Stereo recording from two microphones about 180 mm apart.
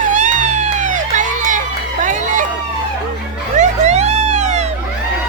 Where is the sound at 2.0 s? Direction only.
45° right (ahead or behind).